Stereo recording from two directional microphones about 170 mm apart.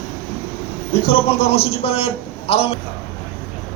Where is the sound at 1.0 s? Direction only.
35° left (ahead or behind).